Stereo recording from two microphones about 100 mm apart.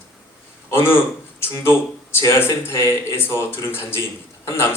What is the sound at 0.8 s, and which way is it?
Speech, 25° left (ahead or behind).